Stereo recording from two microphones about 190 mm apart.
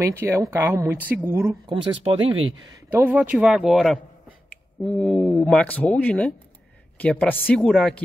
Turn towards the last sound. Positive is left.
turn(degrees=0)  # may be behind; listen again after turning